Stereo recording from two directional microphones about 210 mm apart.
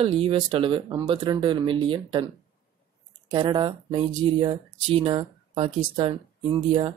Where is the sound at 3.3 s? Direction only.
20° right (ahead or behind).